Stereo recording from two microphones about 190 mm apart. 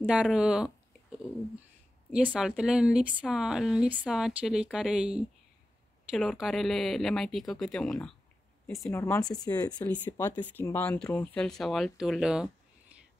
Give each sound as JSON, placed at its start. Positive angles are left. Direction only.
{"t": 0.0, "sound": "speech", "side_deg": -5}
{"t": 2.3, "sound": "speech", "side_deg": -5}
{"t": 8.9, "sound": "speech", "side_deg": 10}